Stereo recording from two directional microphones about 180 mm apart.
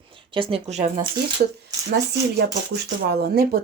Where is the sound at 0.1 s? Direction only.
30° right (ahead or behind).